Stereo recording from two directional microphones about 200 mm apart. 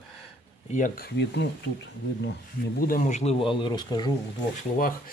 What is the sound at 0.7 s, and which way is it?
Speech, 45° left (ahead or behind).